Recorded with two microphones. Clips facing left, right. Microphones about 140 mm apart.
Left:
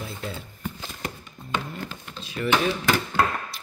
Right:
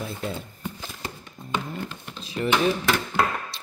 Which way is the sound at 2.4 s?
20° right (ahead or behind).